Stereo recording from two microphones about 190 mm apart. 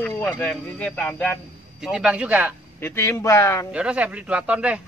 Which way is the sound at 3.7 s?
5° right (ahead or behind).